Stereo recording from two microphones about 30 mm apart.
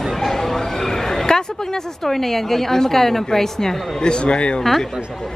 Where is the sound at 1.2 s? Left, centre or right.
Centre.